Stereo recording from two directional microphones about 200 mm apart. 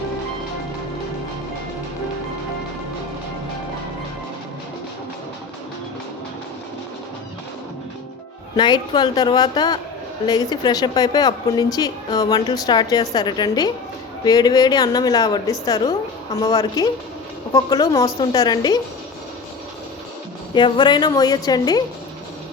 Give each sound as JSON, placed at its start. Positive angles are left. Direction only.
{"t": 8.5, "sound": "a woman's voice", "side_deg": 20}
{"t": 20.5, "sound": "a woman's voice", "side_deg": 25}